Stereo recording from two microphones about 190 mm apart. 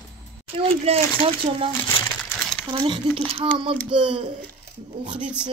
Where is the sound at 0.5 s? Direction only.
30° right (ahead or behind).